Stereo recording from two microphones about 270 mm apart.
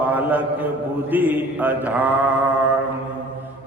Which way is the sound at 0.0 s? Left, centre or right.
Centre.